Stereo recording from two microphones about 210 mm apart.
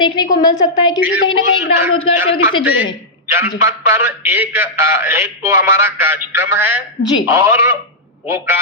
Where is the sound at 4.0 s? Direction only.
10° right (ahead or behind).